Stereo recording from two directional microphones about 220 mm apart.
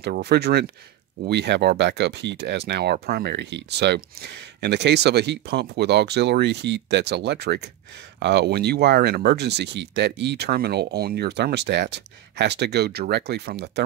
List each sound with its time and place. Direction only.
0.0 s speech: 45° right (ahead or behind)